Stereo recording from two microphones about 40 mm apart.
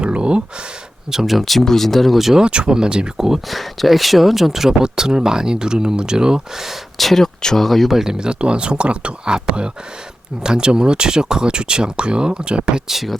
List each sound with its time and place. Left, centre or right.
0.0 s a sound: right
1.1 s speech: centre
2.4 s speech: right
3.2 s speech: centre
3.5 s speech: centre
7.0 s speech: centre
7.9 s speech: centre
12.9 s speech: centre